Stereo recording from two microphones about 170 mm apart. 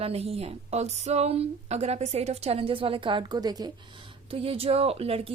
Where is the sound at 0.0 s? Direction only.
35° right (ahead or behind).